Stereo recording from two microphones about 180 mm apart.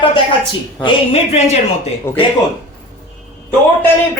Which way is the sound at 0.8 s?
30° left (ahead or behind).